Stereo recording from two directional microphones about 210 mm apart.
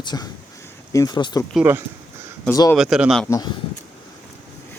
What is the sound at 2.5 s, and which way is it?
Speech, 15° left (ahead or behind).